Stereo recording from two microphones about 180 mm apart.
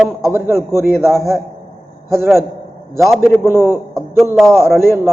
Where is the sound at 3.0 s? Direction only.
Centre (ahead or behind).